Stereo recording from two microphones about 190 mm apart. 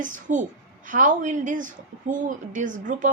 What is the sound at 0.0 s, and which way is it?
A woman's voice, 40° right (ahead or behind).